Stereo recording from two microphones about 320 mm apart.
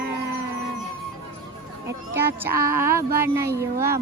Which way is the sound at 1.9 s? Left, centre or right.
Centre.